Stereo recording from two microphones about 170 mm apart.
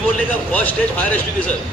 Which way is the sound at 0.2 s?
10° left (ahead or behind).